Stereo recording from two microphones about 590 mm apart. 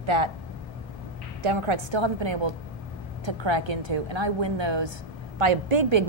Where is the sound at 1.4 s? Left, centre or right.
Right.